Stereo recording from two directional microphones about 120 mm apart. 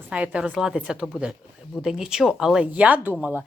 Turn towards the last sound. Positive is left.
turn(degrees=-15)  # may be behind; listen again after turning